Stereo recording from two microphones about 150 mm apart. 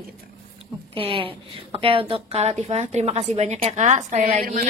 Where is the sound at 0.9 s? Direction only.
35° right (ahead or behind); by 4.6 s 60° right (ahead or behind).